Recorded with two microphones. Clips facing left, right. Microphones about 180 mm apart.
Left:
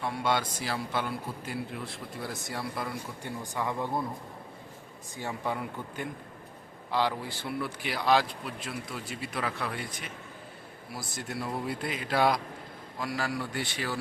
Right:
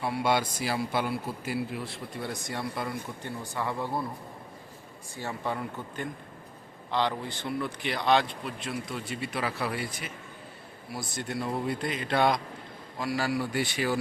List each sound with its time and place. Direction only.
0.0 s speech: 10° right (ahead or behind)
3.2 s speech: 15° left (ahead or behind)
5.1 s speech: 15° left (ahead or behind); by 14.0 s 15° right (ahead or behind)